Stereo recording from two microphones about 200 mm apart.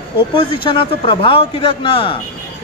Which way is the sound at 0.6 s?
25° left (ahead or behind).